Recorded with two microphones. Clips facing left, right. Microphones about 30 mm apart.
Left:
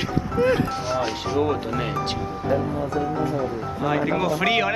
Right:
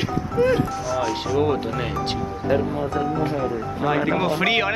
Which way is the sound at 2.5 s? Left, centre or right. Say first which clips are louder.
Right 2 dB; right.